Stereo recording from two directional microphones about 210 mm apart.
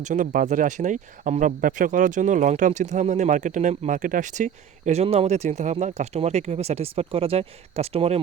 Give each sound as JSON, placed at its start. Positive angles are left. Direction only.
{"t": 0.0, "sound": "speech", "side_deg": -35}